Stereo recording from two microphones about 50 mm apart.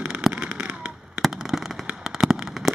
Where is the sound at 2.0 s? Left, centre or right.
Centre.